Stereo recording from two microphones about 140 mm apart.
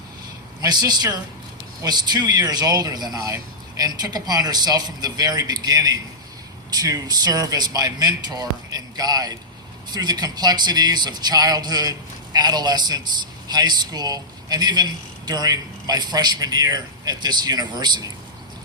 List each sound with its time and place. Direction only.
0.6 s a man's voice: 30° right (ahead or behind)